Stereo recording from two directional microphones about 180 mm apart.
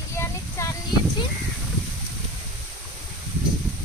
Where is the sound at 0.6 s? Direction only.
15° left (ahead or behind).